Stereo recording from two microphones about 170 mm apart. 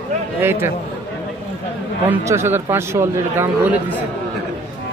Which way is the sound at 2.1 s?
15° right (ahead or behind).